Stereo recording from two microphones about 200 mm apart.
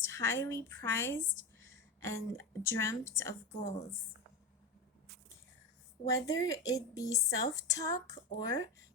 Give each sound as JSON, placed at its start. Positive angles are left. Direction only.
{"t": 0.0, "sound": "a woman's voice", "side_deg": 15}
{"t": 6.2, "sound": "a woman's voice", "side_deg": 15}